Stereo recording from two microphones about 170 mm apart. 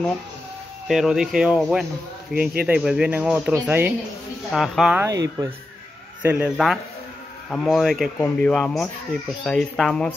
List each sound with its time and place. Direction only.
0.8 s speech: 5° right (ahead or behind)
5.0 s speech: 20° right (ahead or behind)
6.2 s speech: 10° right (ahead or behind)